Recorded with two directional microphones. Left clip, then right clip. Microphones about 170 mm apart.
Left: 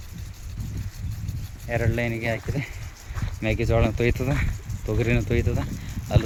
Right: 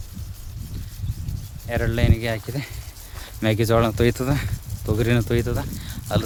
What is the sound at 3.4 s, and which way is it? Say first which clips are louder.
Speech: right 4 dB; 40° right (ahead or behind).